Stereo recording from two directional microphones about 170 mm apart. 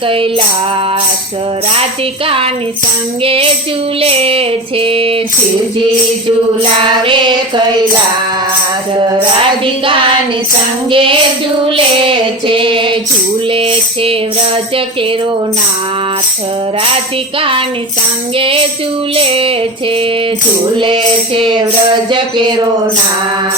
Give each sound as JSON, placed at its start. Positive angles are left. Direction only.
{"t": 0.1, "sound": "female singing", "side_deg": -30}
{"t": 2.2, "sound": "female singing", "side_deg": -35}
{"t": 6.8, "sound": "music", "side_deg": -30}
{"t": 9.8, "sound": "female singing", "side_deg": -30}
{"t": 18.3, "sound": "female singing", "side_deg": -30}
{"t": 20.7, "sound": "music", "side_deg": -30}